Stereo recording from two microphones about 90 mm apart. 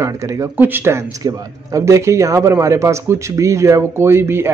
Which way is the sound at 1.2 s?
40° right (ahead or behind).